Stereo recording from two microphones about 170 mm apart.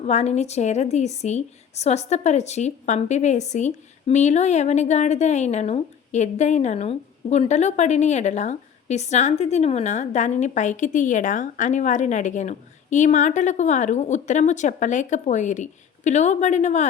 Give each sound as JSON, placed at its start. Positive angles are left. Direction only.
{"t": 0.0, "sound": "a woman's voice", "side_deg": 40}